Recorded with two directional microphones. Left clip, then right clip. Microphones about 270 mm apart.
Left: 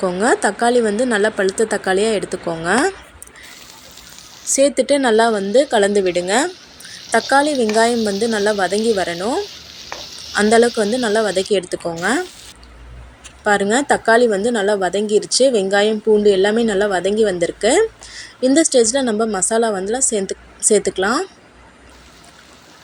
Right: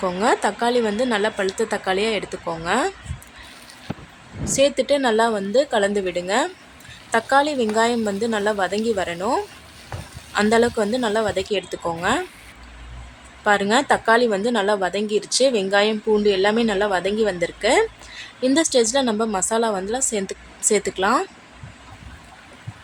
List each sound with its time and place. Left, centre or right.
0.0 s a woman's voice: centre
4.5 s a woman's voice: centre
13.4 s a woman's voice: centre